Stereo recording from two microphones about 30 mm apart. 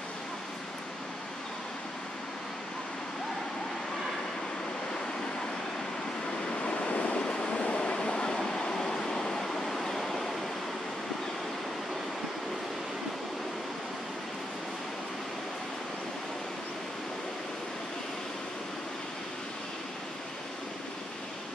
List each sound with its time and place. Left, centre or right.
6.6 s vehicle: left
7.2 s train: left
7.5 s vehicle: left
8.4 s a sound: centre
9.4 s waves: centre